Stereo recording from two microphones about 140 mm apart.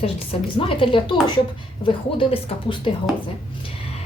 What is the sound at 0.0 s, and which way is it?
A woman's voice, 40° left (ahead or behind).